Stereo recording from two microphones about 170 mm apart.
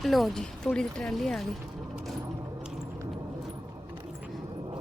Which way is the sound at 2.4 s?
5° right (ahead or behind).